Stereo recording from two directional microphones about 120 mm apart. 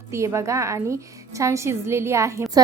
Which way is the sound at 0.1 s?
25° right (ahead or behind).